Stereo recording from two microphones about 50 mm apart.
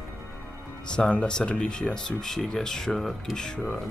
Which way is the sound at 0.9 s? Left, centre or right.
Centre.